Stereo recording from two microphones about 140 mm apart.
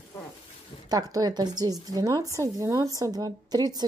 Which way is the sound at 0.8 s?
25° right (ahead or behind).